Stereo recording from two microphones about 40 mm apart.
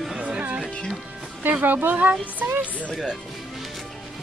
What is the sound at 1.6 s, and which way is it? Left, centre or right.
Speech, right.